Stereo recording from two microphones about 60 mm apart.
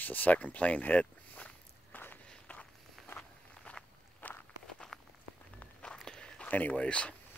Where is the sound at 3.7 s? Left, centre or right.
Left.